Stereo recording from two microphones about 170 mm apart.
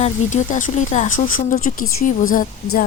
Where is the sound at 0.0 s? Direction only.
45° left (ahead or behind).